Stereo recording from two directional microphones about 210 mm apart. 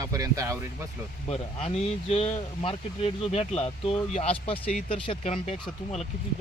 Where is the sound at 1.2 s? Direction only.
30° left (ahead or behind).